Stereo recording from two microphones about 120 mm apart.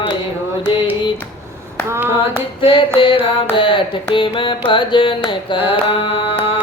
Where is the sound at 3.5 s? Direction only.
45° left (ahead or behind).